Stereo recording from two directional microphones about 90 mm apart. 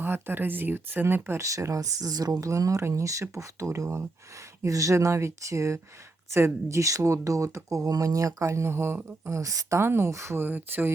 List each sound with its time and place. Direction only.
0.0 s speech: 25° right (ahead or behind)